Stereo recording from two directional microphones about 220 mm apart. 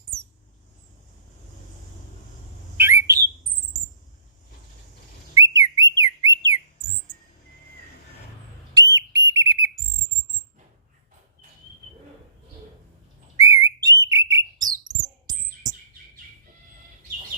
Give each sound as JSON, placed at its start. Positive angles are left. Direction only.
{"t": 2.7, "sound": "bird", "side_deg": -10}
{"t": 5.3, "sound": "whistle", "side_deg": -15}
{"t": 9.0, "sound": "whistle", "side_deg": -15}
{"t": 13.3, "sound": "whistling", "side_deg": -15}
{"t": 13.8, "sound": "bird", "side_deg": -15}